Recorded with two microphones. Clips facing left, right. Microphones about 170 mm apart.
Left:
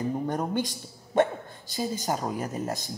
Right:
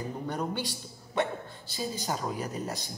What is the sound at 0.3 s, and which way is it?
Speech, 45° left (ahead or behind).